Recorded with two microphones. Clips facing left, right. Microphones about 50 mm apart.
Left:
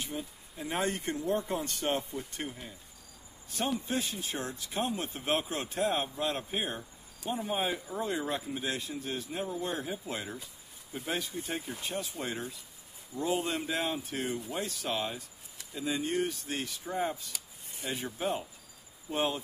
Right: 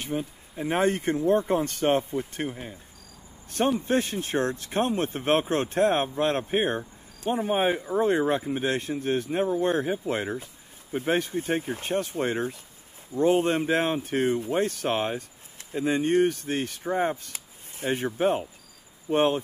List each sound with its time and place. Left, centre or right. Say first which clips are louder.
0.0 s speech: right 8 dB; right
3.4 s speech: right 8 dB; right